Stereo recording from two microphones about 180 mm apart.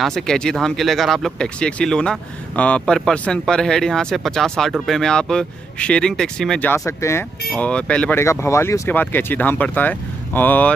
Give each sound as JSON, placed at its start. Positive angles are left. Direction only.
{"t": 0.0, "sound": "speech", "side_deg": 5}